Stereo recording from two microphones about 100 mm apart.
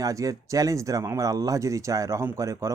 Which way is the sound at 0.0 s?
35° right (ahead or behind).